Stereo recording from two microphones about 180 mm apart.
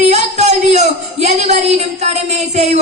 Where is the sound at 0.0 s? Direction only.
40° right (ahead or behind).